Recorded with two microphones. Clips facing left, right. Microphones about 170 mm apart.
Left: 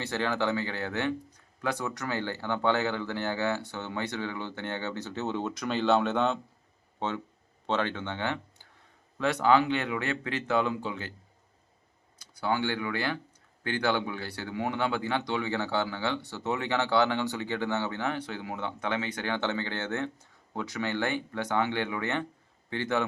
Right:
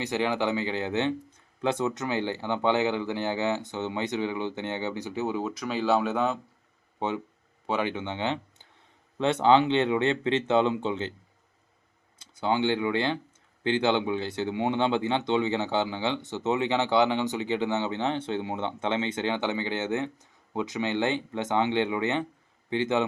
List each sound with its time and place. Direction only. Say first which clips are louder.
0.0 s speech: right 3 dB; 15° right (ahead or behind)
12.2 s speech: right 4 dB; 25° right (ahead or behind)